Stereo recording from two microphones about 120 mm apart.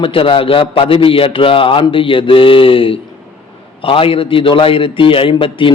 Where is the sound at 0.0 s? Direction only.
50° left (ahead or behind).